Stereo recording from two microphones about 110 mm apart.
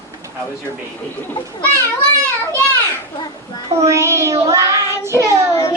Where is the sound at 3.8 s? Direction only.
25° right (ahead or behind).